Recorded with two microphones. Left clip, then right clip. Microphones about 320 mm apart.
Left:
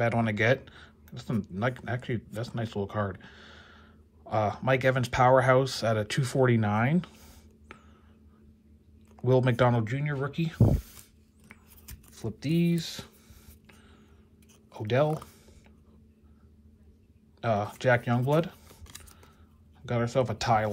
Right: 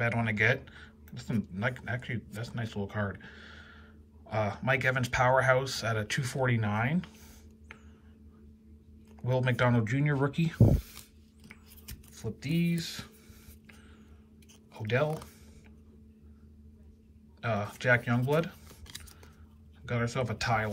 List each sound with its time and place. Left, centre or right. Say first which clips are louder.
0.0 s speech: left 2 dB; centre
9.2 s speech: left 5 dB; centre
11.4 s computer keyboard: right 1 dB; centre
14.7 s speech: left 4 dB; centre
17.4 s speech: left 5 dB; centre
19.8 s speech: left 5 dB; centre